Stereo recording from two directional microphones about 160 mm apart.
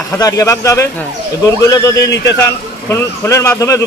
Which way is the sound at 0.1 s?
20° left (ahead or behind).